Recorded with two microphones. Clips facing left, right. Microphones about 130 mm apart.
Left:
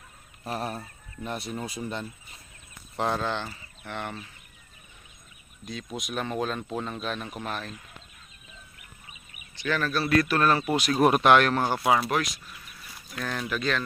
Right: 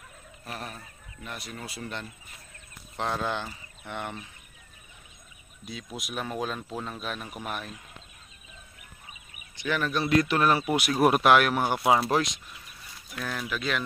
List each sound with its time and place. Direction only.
0.5 s speech: 35° left (ahead or behind); by 2.0 s 15° left (ahead or behind)
3.0 s speech: centre (ahead or behind)
5.7 s speech: 5° right (ahead or behind)
9.6 s speech: 15° right (ahead or behind)
13.1 s speech: 5° right (ahead or behind)